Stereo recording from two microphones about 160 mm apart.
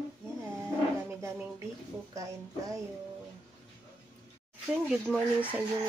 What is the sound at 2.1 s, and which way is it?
Speech, 20° right (ahead or behind).